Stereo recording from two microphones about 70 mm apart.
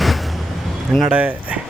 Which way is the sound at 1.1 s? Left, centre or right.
Centre.